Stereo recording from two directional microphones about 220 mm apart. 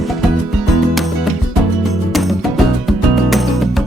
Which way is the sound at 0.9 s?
Centre (ahead or behind).